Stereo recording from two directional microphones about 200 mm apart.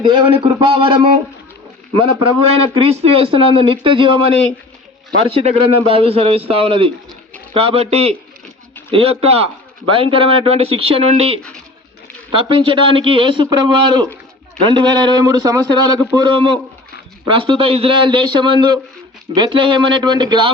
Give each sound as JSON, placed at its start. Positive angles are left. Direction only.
{"t": 0.0, "sound": "a man's voice", "side_deg": -25}
{"t": 2.6, "sound": "a man's voice", "side_deg": -30}